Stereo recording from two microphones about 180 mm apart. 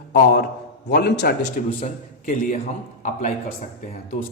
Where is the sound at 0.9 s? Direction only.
65° left (ahead or behind).